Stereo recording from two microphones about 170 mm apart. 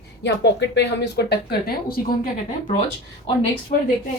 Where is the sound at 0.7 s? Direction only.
90° left; by 2.0 s 70° left (ahead or behind).